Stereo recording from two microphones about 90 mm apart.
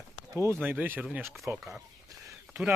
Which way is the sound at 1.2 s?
Centre (ahead or behind).